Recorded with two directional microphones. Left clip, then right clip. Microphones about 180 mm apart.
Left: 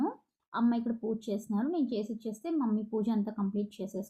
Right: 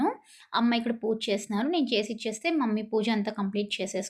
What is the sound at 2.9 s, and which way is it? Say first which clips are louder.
Speech: right 6 dB; 50° right (ahead or behind).